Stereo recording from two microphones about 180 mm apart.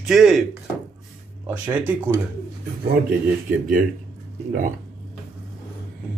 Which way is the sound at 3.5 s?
50° right (ahead or behind).